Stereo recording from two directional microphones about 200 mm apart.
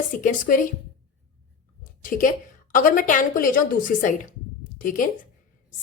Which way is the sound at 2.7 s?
40° left (ahead or behind).